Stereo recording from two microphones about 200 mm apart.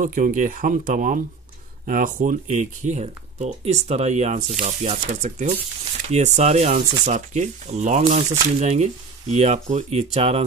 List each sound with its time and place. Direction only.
0.0 s speech: 40° right (ahead or behind)